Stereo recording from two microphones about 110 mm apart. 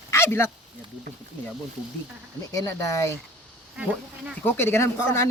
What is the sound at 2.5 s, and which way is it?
Speech, 30° left (ahead or behind).